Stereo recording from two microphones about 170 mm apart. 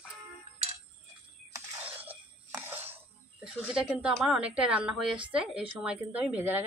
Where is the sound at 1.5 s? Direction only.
10° right (ahead or behind).